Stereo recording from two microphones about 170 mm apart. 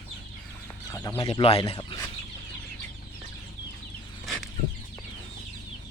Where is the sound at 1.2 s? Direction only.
35° left (ahead or behind).